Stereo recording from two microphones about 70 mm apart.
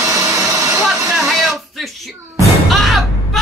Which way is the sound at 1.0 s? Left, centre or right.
Centre.